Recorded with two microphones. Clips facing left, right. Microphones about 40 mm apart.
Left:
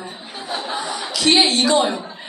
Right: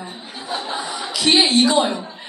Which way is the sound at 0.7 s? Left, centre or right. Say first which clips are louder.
Left 1 dB; centre.